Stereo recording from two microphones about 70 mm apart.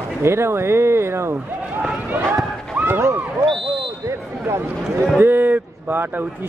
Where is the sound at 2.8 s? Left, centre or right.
Right.